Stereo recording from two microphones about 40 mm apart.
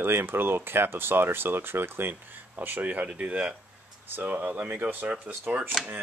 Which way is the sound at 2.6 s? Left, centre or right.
Right.